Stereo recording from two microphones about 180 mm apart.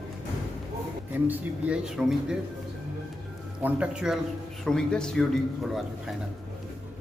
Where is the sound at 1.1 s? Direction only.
10° right (ahead or behind).